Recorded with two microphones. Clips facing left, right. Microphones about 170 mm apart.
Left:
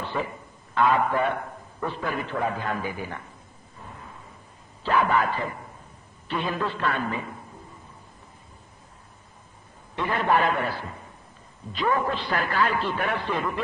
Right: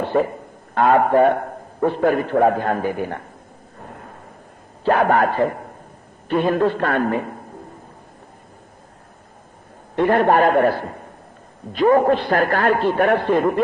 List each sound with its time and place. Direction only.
0.0 s a man's voice: 50° right (ahead or behind)
3.7 s a sound: 55° right (ahead or behind)
4.8 s a man's voice: 60° right (ahead or behind)
9.9 s a man's voice: 55° right (ahead or behind)